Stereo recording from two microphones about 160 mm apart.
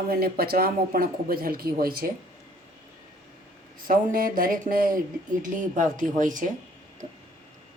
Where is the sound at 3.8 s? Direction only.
60° right (ahead or behind).